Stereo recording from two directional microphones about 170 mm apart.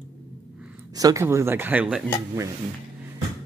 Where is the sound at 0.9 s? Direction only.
20° right (ahead or behind).